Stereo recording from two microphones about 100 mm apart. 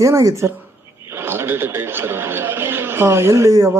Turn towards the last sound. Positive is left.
turn(degrees=-30)  # may be behind; listen again after turning